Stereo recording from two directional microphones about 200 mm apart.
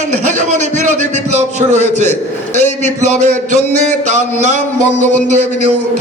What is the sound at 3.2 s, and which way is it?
A man's voice, 35° right (ahead or behind).